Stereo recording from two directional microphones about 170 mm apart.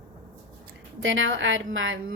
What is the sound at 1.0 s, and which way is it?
A woman's voice, 90° right.